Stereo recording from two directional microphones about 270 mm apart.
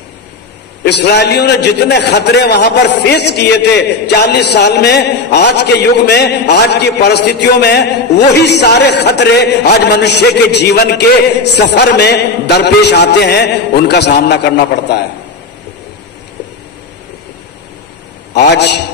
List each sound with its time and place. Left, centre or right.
0.8 s a man's voice: left
18.3 s a man's voice: left